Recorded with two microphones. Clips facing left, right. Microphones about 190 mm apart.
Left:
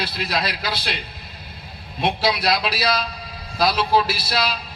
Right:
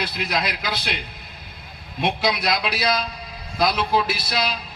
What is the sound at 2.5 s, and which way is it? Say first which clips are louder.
A man's voice: left 1 dB; 20° right (ahead or behind).